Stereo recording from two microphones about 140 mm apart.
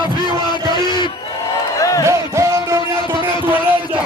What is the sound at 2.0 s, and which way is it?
Music, 20° right (ahead or behind).